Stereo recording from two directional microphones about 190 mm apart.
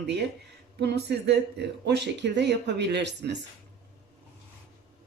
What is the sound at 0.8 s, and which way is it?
Speech, 60° right (ahead or behind).